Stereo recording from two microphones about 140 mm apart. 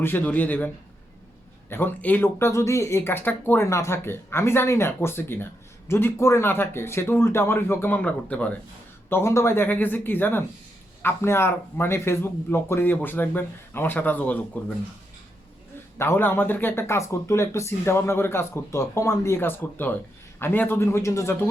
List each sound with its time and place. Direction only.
0.0 s speech: 15° left (ahead or behind)
1.7 s speech: 15° left (ahead or behind)
16.0 s speech: 15° left (ahead or behind)